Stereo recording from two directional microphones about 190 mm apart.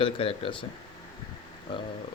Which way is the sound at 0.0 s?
30° left (ahead or behind).